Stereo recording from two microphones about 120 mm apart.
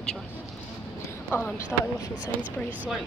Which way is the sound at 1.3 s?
20° left (ahead or behind).